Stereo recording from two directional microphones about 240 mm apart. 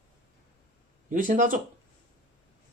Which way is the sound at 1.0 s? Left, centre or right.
Right.